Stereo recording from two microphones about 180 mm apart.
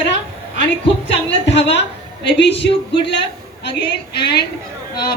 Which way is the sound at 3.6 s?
65° left (ahead or behind).